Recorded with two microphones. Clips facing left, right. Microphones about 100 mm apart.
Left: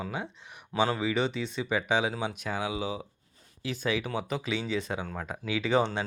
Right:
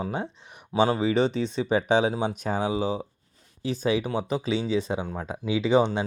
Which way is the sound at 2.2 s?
40° right (ahead or behind).